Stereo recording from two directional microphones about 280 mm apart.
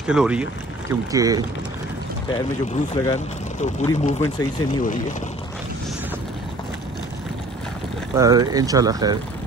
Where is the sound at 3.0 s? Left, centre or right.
Centre.